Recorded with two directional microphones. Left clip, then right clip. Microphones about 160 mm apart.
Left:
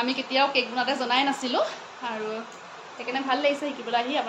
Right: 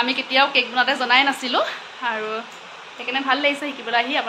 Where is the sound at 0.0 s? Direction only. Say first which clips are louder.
Right 5 dB; 5° right (ahead or behind).